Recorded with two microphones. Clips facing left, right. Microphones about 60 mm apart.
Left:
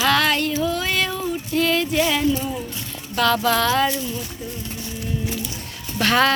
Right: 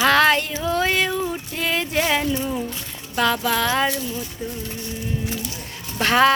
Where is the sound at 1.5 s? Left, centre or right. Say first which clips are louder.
Left 6 dB; centre.